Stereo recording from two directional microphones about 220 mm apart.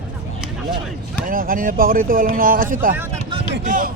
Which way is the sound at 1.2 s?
40° right (ahead or behind).